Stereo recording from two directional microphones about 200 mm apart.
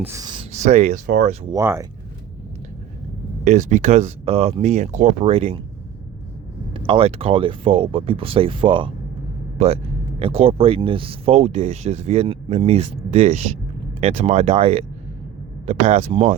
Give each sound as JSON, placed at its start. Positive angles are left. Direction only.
{"t": 0.0, "sound": "speech", "side_deg": -15}
{"t": 0.5, "sound": "speech", "side_deg": -35}
{"t": 1.5, "sound": "speech", "side_deg": -15}
{"t": 3.4, "sound": "speech", "side_deg": -35}
{"t": 6.7, "sound": "speech", "side_deg": -25}